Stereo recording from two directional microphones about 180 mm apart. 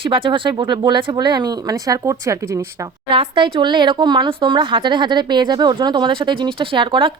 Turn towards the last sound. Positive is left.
turn(degrees=-30)  # may be behind; listen again after turning